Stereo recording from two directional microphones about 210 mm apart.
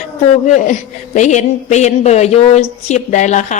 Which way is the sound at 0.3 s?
35° left (ahead or behind).